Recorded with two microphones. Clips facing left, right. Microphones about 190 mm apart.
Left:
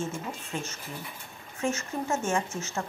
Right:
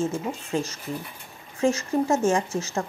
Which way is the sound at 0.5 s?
35° right (ahead or behind).